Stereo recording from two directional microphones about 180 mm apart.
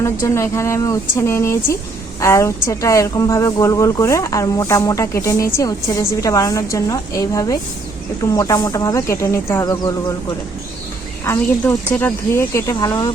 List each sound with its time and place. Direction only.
0.0 s a woman's voice: 15° left (ahead or behind)
11.3 s a woman's voice: 10° left (ahead or behind)